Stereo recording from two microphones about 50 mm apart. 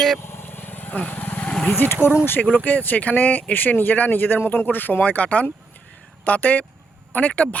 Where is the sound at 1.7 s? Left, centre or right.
Left.